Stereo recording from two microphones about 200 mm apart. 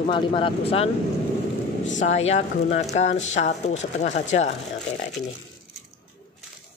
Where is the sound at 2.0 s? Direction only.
35° left (ahead or behind).